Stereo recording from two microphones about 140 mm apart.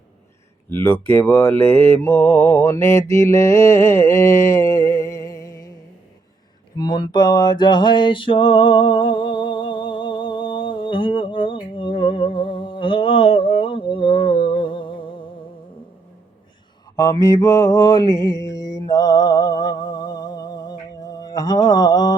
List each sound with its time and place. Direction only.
0.7 s speech: 15° left (ahead or behind)
1.0 s mantra: 15° left (ahead or behind)
6.7 s music: 30° left (ahead or behind)
17.0 s mantra: 25° left (ahead or behind)